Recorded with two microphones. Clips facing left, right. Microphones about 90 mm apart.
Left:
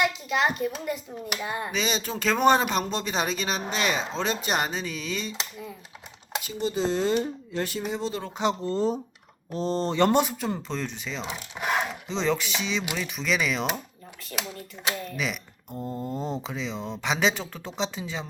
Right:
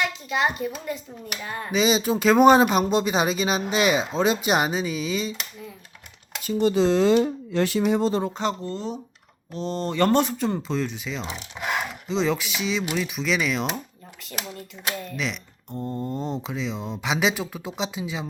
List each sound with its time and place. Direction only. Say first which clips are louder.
0.3 s speech: even; centre (ahead or behind)
1.7 s speech: right 12 dB; 10° right (ahead or behind)
6.6 s speech: right 7 dB; 75° right (ahead or behind)
8.6 s speech: left 5 dB; 40° left (ahead or behind); by 10.2 s 20° left (ahead or behind)
10.2 s speech: right 2 dB; 5° left (ahead or behind)
15.0 s speech: right 1 dB; centre (ahead or behind)